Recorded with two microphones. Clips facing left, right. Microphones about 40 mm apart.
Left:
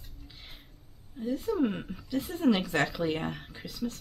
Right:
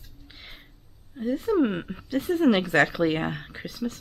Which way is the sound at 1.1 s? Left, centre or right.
Right.